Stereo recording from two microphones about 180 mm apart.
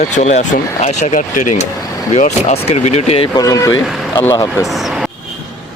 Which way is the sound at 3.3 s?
20° left (ahead or behind).